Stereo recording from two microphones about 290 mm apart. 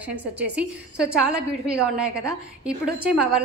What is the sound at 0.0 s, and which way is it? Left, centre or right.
A woman's voice, centre.